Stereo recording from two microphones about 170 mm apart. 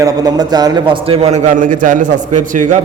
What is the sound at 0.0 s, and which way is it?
A man's voice, 20° right (ahead or behind).